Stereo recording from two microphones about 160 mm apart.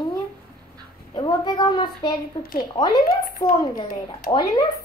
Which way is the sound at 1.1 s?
25° left (ahead or behind).